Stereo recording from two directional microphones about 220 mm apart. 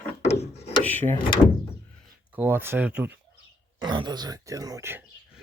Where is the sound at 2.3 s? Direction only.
10° right (ahead or behind).